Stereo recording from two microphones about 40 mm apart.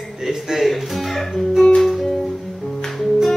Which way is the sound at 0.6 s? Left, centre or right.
Centre.